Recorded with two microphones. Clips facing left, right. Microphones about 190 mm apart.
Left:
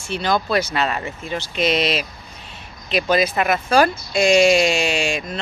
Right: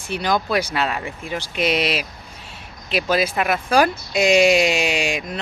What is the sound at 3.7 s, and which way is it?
Speech, 15° right (ahead or behind).